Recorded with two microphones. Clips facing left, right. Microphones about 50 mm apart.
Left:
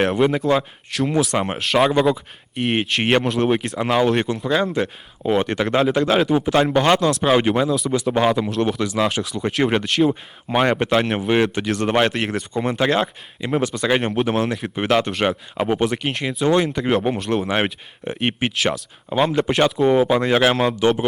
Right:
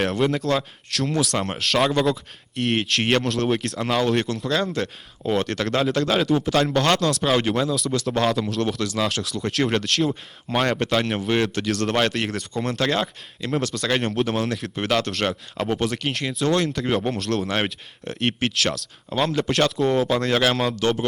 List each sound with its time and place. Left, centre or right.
0.0 s speech: centre